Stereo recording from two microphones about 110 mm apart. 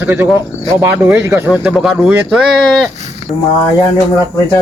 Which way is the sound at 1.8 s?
Centre (ahead or behind).